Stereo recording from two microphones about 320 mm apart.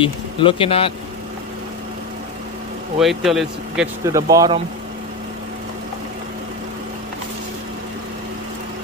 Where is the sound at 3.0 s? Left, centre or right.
Centre.